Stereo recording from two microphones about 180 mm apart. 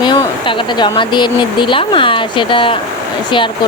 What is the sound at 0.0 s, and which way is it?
Speech, 25° left (ahead or behind).